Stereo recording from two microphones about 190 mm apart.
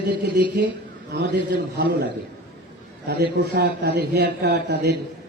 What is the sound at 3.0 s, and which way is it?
A man's voice, 60° right (ahead or behind).